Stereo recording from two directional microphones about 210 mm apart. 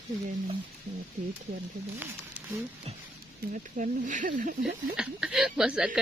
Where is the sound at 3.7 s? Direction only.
40° right (ahead or behind).